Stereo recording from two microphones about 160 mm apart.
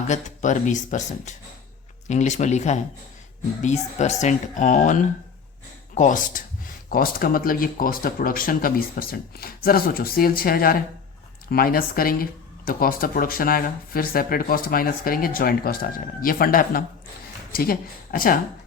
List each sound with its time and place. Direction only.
0.1 s speech: 50° left (ahead or behind)
6.9 s speech: 65° left (ahead or behind)